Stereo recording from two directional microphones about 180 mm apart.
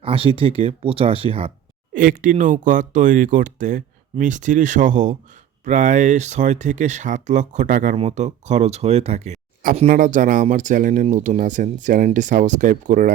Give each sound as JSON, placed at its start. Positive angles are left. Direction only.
{"t": 0.0, "sound": "speech", "side_deg": -30}
{"t": 1.9, "sound": "speech", "side_deg": -50}